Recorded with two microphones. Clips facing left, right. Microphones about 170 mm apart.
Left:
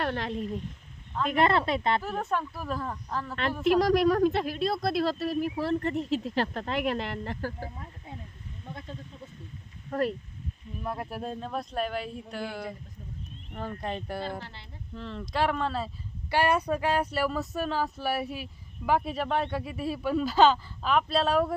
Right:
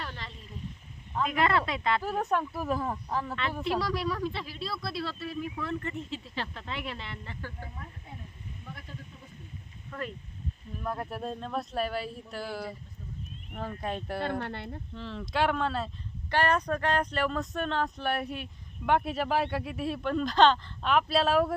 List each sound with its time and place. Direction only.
0.0 s speech: 65° left (ahead or behind)
1.1 s speech: 5° right (ahead or behind)
1.4 s speech: 25° left (ahead or behind)
2.0 s speech: 10° right (ahead or behind)
3.8 s speech: 45° left (ahead or behind)
9.9 s speech: 40° left (ahead or behind)
10.8 s speech: 5° left (ahead or behind)
14.2 s speech: 60° right (ahead or behind)
14.9 s speech: centre (ahead or behind)